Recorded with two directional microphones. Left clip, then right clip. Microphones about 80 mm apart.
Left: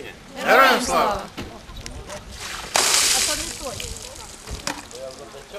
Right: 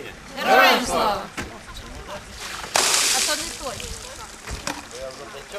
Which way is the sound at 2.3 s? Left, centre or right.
Centre.